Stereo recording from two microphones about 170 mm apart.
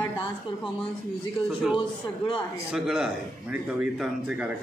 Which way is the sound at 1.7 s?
30° left (ahead or behind).